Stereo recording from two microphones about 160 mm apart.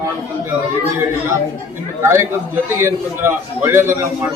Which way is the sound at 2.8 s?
15° right (ahead or behind).